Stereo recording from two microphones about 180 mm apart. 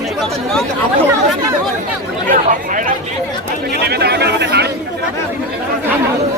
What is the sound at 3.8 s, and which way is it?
Chatter, 65° right (ahead or behind).